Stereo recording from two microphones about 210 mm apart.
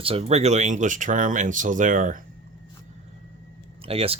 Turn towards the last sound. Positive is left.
turn(degrees=-30)  # may be behind; listen again after turning